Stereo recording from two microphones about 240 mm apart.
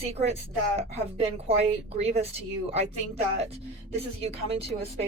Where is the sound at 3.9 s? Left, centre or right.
Right.